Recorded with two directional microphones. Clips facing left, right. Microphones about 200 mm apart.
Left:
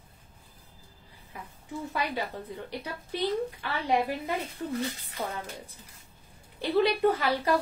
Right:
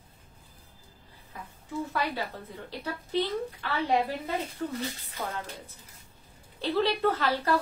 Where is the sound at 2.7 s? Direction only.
15° left (ahead or behind).